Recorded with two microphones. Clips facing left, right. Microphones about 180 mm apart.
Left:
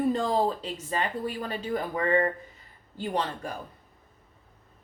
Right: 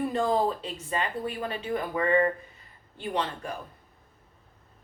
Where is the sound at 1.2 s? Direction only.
35° left (ahead or behind).